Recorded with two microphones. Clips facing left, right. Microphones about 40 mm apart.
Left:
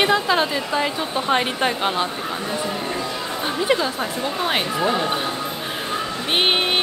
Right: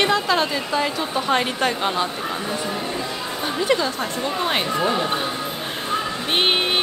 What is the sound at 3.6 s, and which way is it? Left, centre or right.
Speech, centre.